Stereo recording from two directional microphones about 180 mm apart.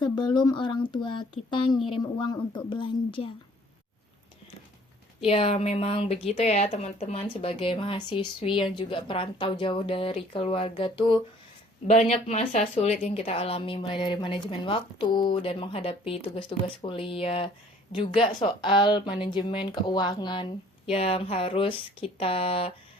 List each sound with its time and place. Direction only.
0.0 s a woman's voice: 25° left (ahead or behind)
5.2 s a woman's voice: 35° left (ahead or behind)